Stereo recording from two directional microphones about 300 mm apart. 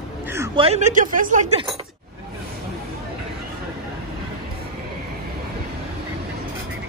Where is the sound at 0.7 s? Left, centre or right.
Right.